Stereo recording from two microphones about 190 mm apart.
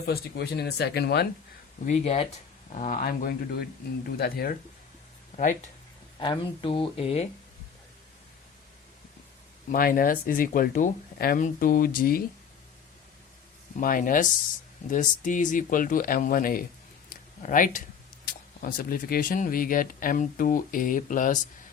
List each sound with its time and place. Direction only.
0.0 s speech: 60° left (ahead or behind)
1.9 s speech: 35° left (ahead or behind); by 4.5 s 55° left (ahead or behind)
6.1 s speech: 25° left (ahead or behind)
9.7 s speech: 50° left (ahead or behind)
13.7 s speech: 45° left (ahead or behind)
17.1 s a sound: 45° left (ahead or behind)
18.3 s speech: 50° left (ahead or behind)